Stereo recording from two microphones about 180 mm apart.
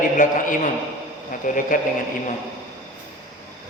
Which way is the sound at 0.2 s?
45° left (ahead or behind).